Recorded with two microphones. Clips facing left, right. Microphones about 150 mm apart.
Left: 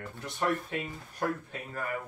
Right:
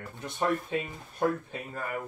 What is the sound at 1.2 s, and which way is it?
Speech, 25° right (ahead or behind).